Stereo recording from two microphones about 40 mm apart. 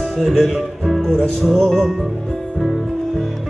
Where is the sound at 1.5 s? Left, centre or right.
Centre.